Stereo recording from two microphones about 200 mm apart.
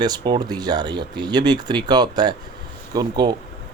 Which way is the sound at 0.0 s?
20° right (ahead or behind).